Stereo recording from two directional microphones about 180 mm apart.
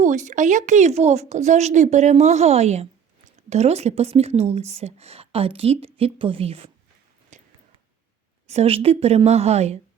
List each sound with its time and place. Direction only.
0.0 s speech: 45° right (ahead or behind)
7.3 s a sound: 40° right (ahead or behind)
8.4 s speech: 35° right (ahead or behind)